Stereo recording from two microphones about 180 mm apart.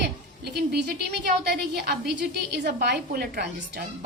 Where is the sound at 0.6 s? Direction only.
60° right (ahead or behind).